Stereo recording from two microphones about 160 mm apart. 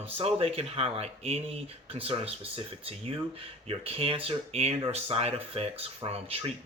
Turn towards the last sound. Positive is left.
turn(degrees=-35)  # may be behind; listen again after turning